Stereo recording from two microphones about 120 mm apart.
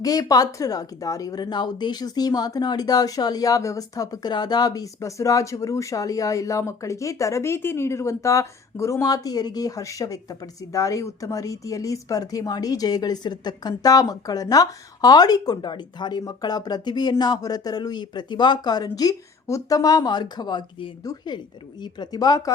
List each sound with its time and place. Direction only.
0.0 s a woman's voice: 30° left (ahead or behind)